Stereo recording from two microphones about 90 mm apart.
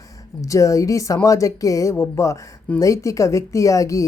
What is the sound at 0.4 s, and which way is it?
A woman's voice, 40° left (ahead or behind).